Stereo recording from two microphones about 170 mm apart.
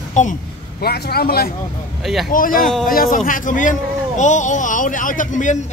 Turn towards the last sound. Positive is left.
turn(degrees=45)  # may be behind; listen again after turning